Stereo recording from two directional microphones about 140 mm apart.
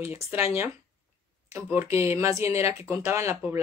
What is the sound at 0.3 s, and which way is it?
Speech, 15° right (ahead or behind).